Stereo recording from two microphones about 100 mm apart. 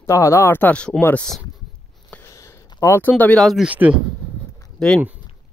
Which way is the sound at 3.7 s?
15° right (ahead or behind).